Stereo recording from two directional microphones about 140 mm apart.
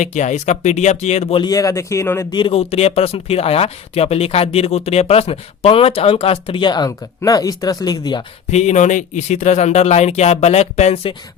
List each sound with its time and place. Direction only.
0.0 s speech: 60° left (ahead or behind)
1.4 s speech: 25° left (ahead or behind)
2.3 s speech: 40° left (ahead or behind)
8.4 s speech: 55° left (ahead or behind)